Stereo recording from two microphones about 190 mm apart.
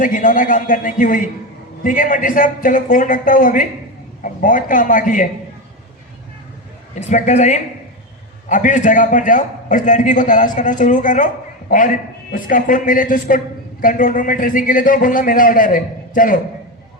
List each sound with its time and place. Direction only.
0.0 s a man's voice: 45° left (ahead or behind)
7.0 s a man's voice: 40° left (ahead or behind)
12.3 s a man's voice: 45° left (ahead or behind)